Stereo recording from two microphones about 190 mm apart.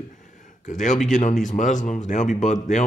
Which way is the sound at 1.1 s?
40° left (ahead or behind).